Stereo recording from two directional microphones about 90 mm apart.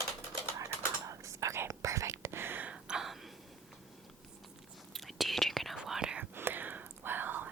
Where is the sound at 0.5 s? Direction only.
35° right (ahead or behind); by 2.8 s 20° right (ahead or behind).